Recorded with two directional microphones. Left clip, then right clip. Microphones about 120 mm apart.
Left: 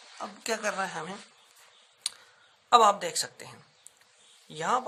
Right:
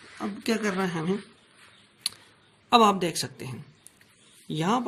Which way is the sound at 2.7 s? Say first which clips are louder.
Right 1 dB; 20° right (ahead or behind).